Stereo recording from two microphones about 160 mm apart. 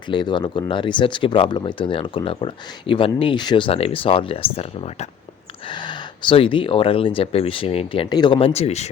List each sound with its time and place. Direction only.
0.1 s speech: 30° left (ahead or behind)